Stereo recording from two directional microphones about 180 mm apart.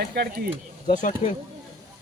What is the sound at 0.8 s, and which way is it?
Speech, 45° left (ahead or behind).